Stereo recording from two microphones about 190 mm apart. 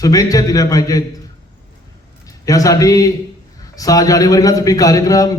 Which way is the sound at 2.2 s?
20° left (ahead or behind).